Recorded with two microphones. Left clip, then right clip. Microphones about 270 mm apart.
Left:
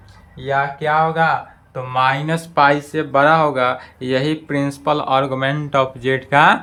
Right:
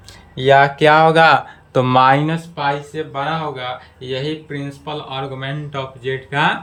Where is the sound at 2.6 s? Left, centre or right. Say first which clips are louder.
Left 8 dB; centre.